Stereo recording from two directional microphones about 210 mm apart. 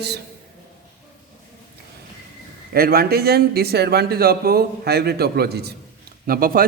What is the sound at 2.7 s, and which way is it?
Speech, 45° right (ahead or behind).